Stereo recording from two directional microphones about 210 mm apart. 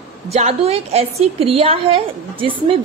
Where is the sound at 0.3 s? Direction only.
30° right (ahead or behind).